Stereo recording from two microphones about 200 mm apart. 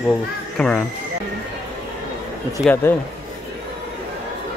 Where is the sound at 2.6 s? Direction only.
10° left (ahead or behind).